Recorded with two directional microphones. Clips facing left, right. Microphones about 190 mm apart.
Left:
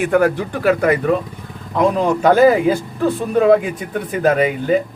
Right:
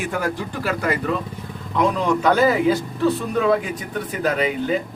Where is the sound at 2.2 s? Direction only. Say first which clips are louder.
Left 6 dB; 50° left (ahead or behind).